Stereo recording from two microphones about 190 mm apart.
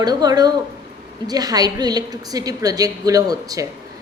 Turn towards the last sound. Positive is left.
turn(degrees=-20)  # may be behind; listen again after turning